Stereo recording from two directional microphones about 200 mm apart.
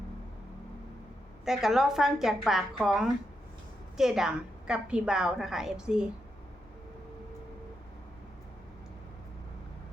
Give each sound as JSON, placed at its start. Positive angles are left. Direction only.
{"t": 1.5, "sound": "a woman's voice", "side_deg": 0}